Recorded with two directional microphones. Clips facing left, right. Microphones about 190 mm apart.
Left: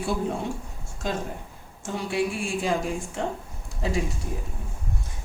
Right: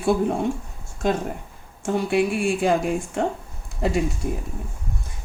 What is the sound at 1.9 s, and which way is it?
Speech, 60° right (ahead or behind).